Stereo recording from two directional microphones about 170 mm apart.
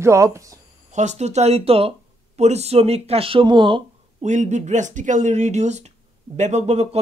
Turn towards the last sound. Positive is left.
turn(degrees=-40)  # may be behind; listen again after turning